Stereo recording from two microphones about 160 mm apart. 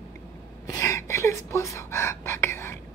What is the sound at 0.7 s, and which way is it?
Gasp, 20° left (ahead or behind).